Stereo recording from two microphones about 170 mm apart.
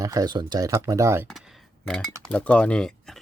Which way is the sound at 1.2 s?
Centre (ahead or behind).